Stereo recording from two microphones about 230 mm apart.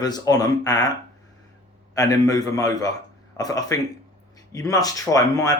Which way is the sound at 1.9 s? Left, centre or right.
Centre.